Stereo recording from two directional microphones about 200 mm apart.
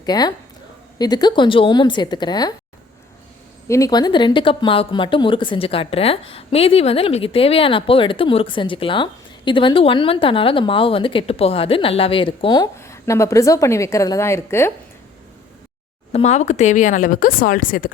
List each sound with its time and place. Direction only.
0.0 s speech: 20° left (ahead or behind)
3.7 s speech: 15° left (ahead or behind)
16.1 s speech: 35° left (ahead or behind)